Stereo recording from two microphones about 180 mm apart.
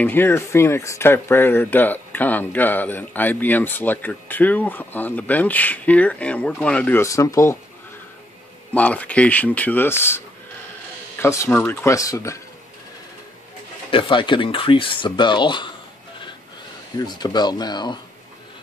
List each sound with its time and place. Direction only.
0.0 s speech: 10° left (ahead or behind)
8.7 s speech: 10° left (ahead or behind)
13.8 s speech: 30° left (ahead or behind)
16.9 s speech: 25° left (ahead or behind)